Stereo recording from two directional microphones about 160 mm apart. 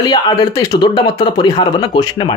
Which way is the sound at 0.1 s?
25° left (ahead or behind).